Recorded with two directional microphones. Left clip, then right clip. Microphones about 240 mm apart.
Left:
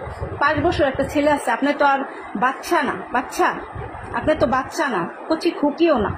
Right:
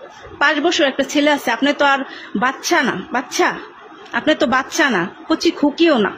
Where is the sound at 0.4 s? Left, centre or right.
Right.